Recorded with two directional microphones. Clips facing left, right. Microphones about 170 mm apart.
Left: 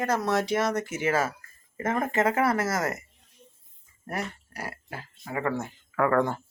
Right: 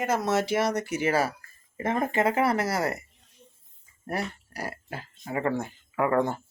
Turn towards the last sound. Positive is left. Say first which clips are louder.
# left 1 dB
turn(degrees=-20)  # may be behind; listen again after turning